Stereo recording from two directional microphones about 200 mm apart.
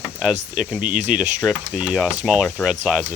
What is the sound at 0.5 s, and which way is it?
Speech, 5° right (ahead or behind).